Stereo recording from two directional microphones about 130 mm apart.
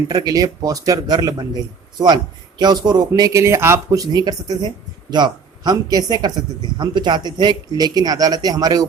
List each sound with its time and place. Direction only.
0.1 s a man's voice: 30° right (ahead or behind)